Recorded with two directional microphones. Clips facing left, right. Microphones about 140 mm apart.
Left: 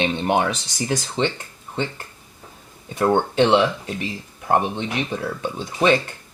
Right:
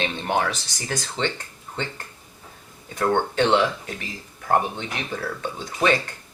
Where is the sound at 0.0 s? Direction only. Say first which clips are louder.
Left 4 dB; 20° left (ahead or behind).